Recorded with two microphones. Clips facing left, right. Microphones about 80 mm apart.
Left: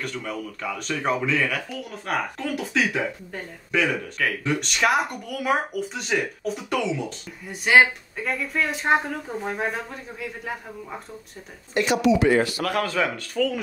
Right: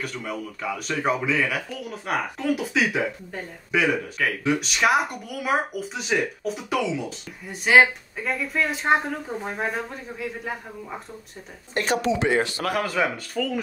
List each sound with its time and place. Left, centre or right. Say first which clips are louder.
0.0 s speech: even; centre
11.7 s speech: left 3 dB; right
12.7 s speech: right 1 dB; centre